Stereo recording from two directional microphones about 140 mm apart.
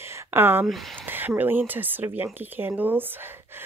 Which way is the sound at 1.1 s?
15° right (ahead or behind).